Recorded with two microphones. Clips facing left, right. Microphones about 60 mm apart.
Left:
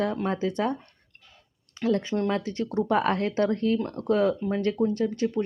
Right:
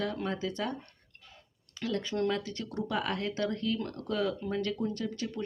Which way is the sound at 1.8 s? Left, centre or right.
Left.